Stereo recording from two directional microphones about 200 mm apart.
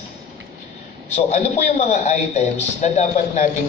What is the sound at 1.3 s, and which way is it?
A man's voice, 35° left (ahead or behind).